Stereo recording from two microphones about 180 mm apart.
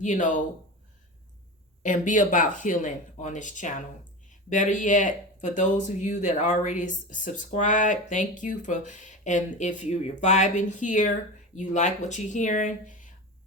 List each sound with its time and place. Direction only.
0.0 s speech: 45° left (ahead or behind)
1.8 s speech: 45° left (ahead or behind)